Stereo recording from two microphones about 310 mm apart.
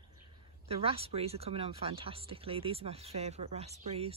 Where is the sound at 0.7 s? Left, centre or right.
Centre.